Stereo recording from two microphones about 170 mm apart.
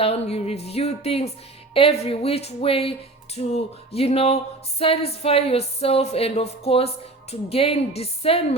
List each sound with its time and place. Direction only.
0.0 s speech: 35° left (ahead or behind)